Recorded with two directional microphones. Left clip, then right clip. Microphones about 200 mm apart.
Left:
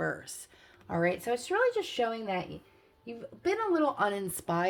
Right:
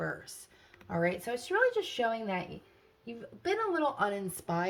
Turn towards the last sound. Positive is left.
turn(degrees=40)  # may be behind; listen again after turning